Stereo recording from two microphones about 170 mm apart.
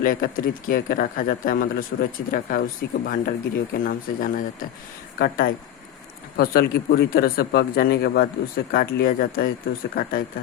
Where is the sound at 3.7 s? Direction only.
55° left (ahead or behind).